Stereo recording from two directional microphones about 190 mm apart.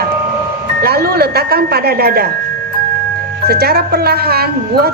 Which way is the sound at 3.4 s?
55° right (ahead or behind).